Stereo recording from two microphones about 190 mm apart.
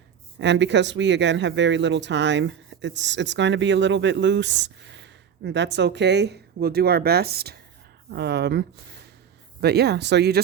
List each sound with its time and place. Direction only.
0.3 s speech: 70° right (ahead or behind)